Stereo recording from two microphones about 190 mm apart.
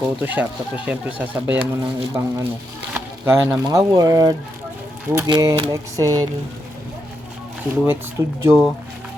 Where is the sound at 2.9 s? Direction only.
10° right (ahead or behind).